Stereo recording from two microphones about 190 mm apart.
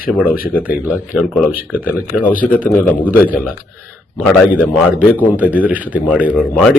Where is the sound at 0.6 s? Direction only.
10° right (ahead or behind).